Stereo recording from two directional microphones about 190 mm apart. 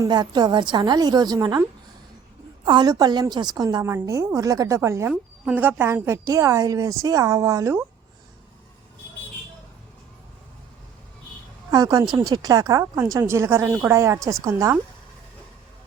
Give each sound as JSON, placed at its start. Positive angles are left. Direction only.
{"t": 0.0, "sound": "a woman's voice", "side_deg": -20}
{"t": 2.6, "sound": "a woman's voice", "side_deg": -20}
{"t": 11.7, "sound": "a woman's voice", "side_deg": -20}